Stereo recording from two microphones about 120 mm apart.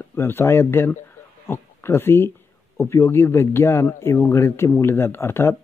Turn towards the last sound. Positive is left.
turn(degrees=20)  # may be behind; listen again after turning